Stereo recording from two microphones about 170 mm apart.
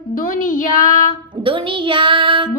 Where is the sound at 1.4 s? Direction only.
30° right (ahead or behind).